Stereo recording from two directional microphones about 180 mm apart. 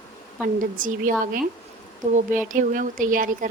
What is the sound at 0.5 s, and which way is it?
Speech, 50° right (ahead or behind).